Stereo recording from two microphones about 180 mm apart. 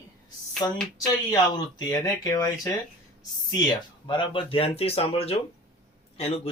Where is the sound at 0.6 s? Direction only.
20° left (ahead or behind).